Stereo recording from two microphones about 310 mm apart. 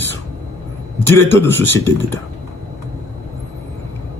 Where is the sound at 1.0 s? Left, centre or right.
Centre.